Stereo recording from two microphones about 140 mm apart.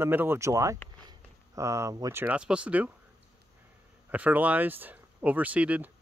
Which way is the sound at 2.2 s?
10° right (ahead or behind).